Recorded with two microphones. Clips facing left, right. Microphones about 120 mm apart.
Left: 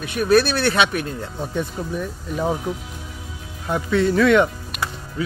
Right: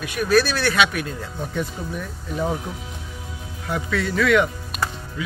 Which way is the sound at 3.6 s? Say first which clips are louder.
Left 5 dB; 25° left (ahead or behind).